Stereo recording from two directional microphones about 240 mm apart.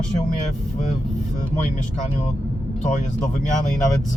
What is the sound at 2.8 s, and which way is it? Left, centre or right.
Speech, left.